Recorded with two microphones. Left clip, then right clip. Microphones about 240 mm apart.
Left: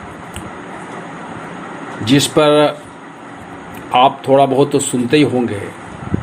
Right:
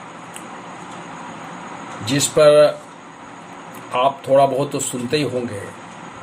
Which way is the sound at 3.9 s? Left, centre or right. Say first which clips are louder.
Left 6 dB; centre.